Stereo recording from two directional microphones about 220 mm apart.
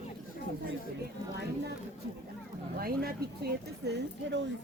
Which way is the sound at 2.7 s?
40° right (ahead or behind).